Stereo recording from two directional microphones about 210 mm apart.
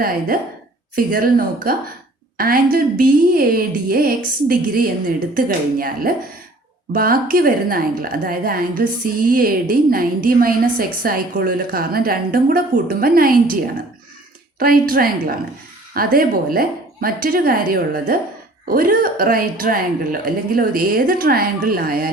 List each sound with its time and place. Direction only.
0.9 s a woman's voice: 45° right (ahead or behind)
14.6 s a woman's voice: 45° right (ahead or behind)